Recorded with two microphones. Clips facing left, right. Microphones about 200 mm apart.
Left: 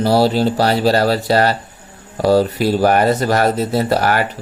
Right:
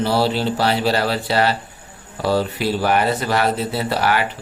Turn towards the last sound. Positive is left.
turn(degrees=45)  # may be behind; listen again after turning